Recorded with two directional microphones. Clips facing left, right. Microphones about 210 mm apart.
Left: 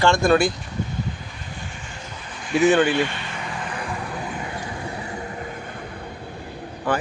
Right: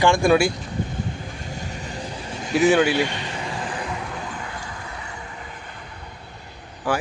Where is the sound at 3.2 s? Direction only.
30° right (ahead or behind).